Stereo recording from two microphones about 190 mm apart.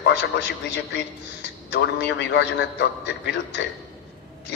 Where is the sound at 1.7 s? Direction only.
65° left (ahead or behind).